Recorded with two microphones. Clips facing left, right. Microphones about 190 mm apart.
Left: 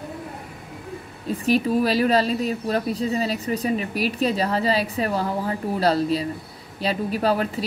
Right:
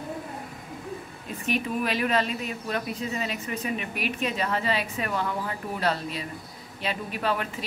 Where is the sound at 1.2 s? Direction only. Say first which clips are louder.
Left 9 dB; 35° left (ahead or behind).